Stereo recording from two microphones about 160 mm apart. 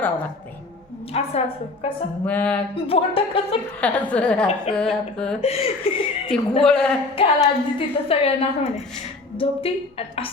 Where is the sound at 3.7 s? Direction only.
10° left (ahead or behind).